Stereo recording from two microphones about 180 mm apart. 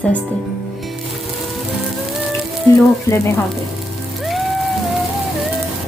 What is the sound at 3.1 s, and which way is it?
Speech, 15° left (ahead or behind).